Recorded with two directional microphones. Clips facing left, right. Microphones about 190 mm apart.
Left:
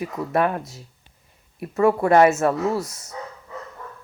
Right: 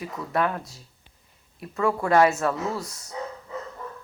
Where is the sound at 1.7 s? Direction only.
25° left (ahead or behind).